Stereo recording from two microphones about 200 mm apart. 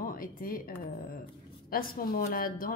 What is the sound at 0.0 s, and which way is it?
Speech, 45° left (ahead or behind).